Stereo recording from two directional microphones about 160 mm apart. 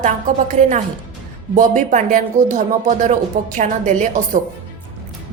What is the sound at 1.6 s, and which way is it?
A woman's voice, 55° right (ahead or behind).